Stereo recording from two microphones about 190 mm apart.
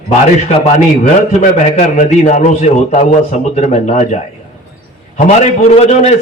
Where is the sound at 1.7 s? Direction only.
35° left (ahead or behind).